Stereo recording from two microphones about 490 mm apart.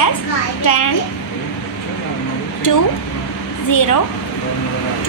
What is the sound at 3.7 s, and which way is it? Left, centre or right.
Speech, left.